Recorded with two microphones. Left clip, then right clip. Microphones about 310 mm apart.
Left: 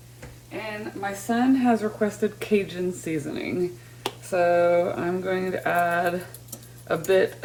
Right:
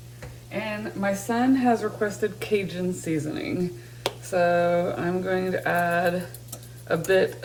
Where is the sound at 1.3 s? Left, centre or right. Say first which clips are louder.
Left 1 dB; centre.